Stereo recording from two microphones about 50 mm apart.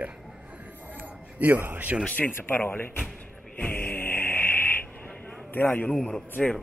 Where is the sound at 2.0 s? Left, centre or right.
Left.